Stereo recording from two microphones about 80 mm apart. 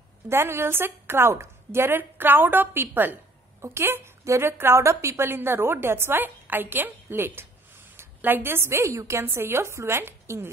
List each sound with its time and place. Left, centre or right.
0.3 s a woman's voice: right